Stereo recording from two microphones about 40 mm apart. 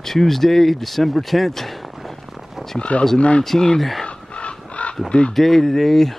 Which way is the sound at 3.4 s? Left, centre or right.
Centre.